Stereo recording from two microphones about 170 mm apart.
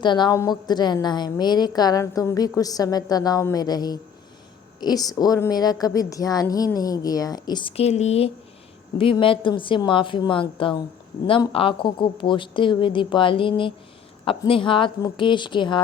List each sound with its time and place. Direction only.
0.0 s a woman's voice: 25° left (ahead or behind)